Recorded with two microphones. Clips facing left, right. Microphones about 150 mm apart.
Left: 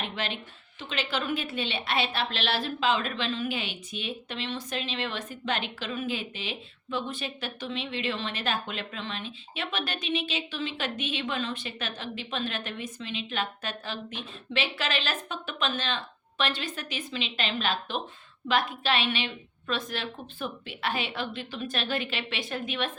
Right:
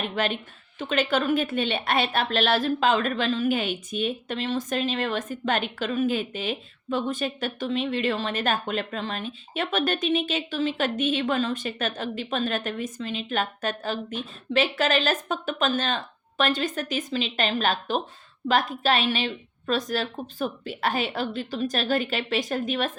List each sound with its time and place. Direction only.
0.2 s a woman's voice: 50° right (ahead or behind)